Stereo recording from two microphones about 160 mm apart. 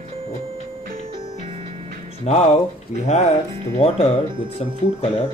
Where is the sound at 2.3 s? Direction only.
45° left (ahead or behind).